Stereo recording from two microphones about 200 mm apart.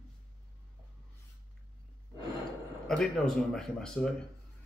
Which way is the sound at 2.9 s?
5° left (ahead or behind).